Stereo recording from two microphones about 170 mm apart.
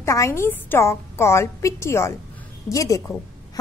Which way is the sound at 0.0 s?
15° left (ahead or behind).